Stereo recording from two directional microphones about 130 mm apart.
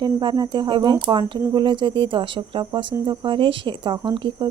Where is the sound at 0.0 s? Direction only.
35° right (ahead or behind).